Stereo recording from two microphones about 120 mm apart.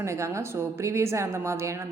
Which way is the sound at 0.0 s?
25° right (ahead or behind).